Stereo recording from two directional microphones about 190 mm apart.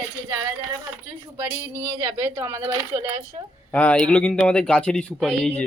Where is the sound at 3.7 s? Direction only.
5° left (ahead or behind).